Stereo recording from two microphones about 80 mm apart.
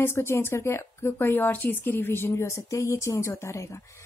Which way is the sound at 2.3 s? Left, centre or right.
Left.